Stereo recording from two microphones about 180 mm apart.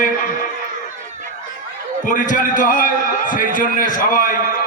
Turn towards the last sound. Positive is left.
turn(degrees=50)  # may be behind; listen again after turning